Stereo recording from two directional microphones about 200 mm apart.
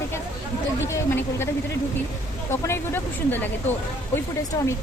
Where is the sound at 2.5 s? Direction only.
10° left (ahead or behind).